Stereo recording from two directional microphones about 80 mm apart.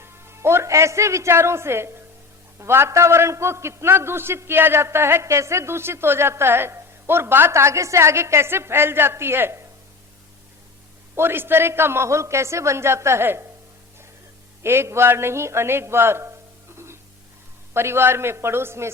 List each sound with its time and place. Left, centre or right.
0.0 s a man's voice: right
11.1 s a man's voice: right
14.6 s a man's voice: right
16.7 s music: right
17.7 s a man's voice: right